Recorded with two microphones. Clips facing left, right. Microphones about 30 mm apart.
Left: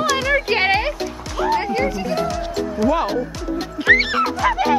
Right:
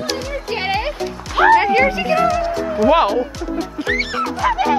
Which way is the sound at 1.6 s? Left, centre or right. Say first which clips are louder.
Right 6 dB; right.